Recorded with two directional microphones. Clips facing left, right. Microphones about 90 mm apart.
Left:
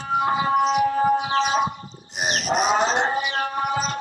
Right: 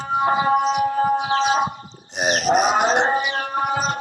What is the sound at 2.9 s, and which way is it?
Music, 25° right (ahead or behind).